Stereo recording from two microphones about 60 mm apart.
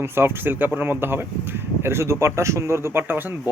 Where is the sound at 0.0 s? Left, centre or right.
Right.